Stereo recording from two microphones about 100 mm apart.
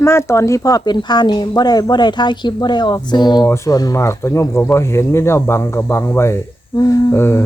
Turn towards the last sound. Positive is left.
turn(degrees=25)  # may be behind; listen again after turning